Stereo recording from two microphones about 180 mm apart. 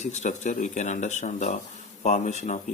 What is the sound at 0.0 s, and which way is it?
Speech, 40° left (ahead or behind).